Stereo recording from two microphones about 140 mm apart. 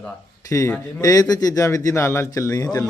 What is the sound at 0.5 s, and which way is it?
Speech, 20° left (ahead or behind).